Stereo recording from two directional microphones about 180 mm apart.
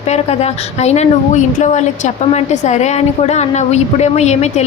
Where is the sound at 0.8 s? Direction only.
40° left (ahead or behind).